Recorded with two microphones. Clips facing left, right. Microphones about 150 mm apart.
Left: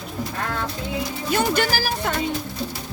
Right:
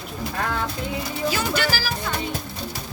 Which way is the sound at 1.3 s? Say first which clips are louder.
Left 5 dB; 50° left (ahead or behind).